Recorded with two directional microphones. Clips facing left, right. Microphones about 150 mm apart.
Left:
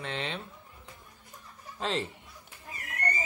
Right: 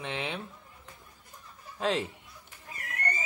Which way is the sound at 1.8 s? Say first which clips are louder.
Right 3 dB; 5° right (ahead or behind).